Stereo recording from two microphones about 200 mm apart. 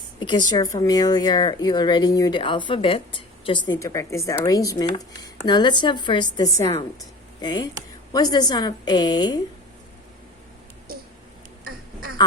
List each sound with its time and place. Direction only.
0.2 s a woman's voice: 25° left (ahead or behind)